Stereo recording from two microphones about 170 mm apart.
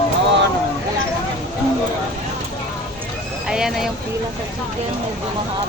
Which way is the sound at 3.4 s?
5° right (ahead or behind).